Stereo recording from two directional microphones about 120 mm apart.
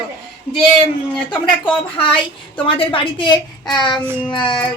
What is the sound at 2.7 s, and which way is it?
A woman's voice, 45° left (ahead or behind).